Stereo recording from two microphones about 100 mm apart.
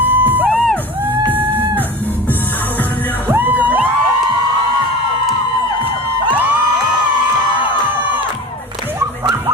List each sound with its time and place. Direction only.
0.0 s music: 20° right (ahead or behind)
3.2 s music: 20° right (ahead or behind)